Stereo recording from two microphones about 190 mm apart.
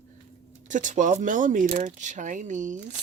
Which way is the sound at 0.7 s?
40° right (ahead or behind).